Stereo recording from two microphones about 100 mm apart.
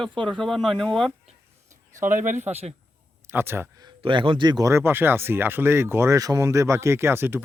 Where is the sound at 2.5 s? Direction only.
90° right.